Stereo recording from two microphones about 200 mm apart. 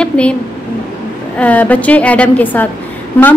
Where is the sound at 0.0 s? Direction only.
5° left (ahead or behind).